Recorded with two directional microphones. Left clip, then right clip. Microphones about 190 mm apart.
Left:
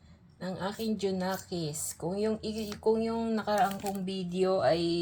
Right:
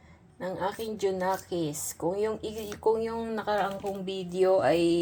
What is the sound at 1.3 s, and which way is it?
A woman's voice, 20° right (ahead or behind).